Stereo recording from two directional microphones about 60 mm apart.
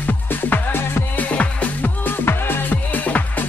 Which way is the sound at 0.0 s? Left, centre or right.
Left.